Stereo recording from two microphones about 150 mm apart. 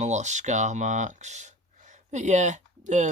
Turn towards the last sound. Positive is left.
turn(degrees=-55)  # may be behind; listen again after turning